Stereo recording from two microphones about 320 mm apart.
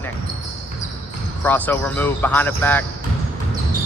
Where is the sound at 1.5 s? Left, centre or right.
Centre.